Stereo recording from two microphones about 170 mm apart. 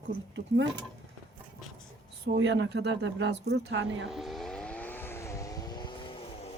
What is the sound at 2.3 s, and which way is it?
Speech, 90° right.